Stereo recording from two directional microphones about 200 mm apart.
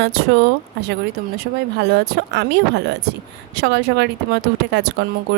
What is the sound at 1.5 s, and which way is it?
A woman's voice, 45° right (ahead or behind).